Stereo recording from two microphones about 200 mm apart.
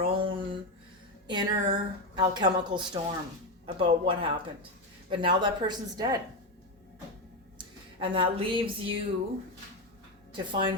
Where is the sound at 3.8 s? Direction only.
25° right (ahead or behind).